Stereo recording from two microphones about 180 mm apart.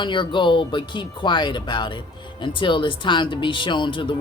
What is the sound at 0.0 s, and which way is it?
Speech, 25° left (ahead or behind).